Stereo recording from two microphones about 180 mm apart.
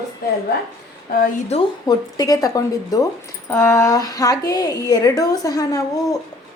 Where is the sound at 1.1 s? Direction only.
55° left (ahead or behind).